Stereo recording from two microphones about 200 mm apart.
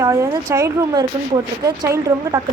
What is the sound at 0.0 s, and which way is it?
A woman's voice, 15° right (ahead or behind).